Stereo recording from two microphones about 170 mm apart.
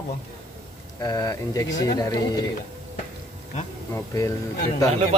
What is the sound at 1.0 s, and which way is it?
Speech, 20° left (ahead or behind).